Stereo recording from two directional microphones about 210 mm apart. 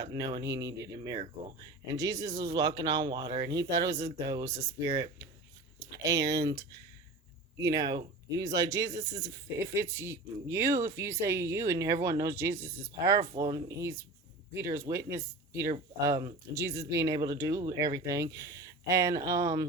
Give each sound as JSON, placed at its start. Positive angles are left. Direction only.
{"t": 0.0, "sound": "speech", "side_deg": -20}
{"t": 5.9, "sound": "speech", "side_deg": -15}